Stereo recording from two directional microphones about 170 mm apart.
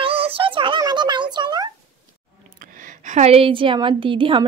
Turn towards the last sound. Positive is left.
turn(degrees=-30)  # may be behind; listen again after turning